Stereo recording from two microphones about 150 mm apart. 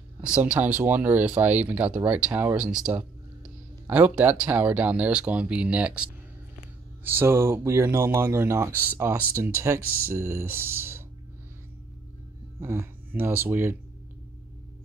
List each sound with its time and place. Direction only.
0.2 s speech: 10° right (ahead or behind)
7.1 s speech: 15° right (ahead or behind)
12.5 s speech: 15° right (ahead or behind)